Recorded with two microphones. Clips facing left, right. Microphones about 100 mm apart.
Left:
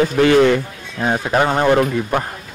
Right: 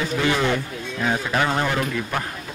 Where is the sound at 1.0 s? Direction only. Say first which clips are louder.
Left 6 dB; 35° left (ahead or behind).